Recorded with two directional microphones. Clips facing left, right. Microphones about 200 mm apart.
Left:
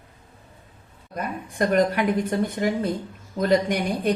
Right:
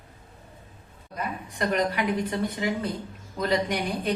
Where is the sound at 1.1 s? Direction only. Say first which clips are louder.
Left 3 dB; 50° left (ahead or behind).